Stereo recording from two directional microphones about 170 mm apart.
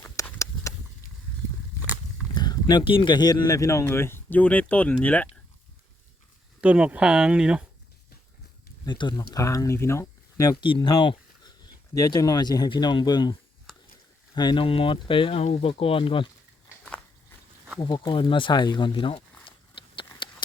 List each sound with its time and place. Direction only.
0.2 s a sound: 15° left (ahead or behind)
2.3 s speech: 25° left (ahead or behind)
6.6 s speech: 5° right (ahead or behind)
8.8 s speech: 25° left (ahead or behind)
14.3 s speech: 25° left (ahead or behind)
16.6 s walk: 5° left (ahead or behind)
17.7 s speech: 25° left (ahead or behind)
19.5 s a sound: 30° left (ahead or behind)